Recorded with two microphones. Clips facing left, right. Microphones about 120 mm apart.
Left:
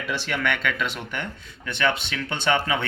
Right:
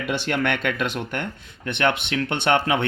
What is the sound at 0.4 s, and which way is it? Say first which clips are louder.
A man's voice: right 2 dB; 55° right (ahead or behind).